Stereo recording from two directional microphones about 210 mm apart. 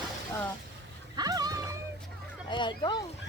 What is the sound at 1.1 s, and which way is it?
Music, 20° right (ahead or behind).